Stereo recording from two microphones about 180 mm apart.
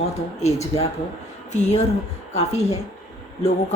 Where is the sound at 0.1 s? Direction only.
40° left (ahead or behind).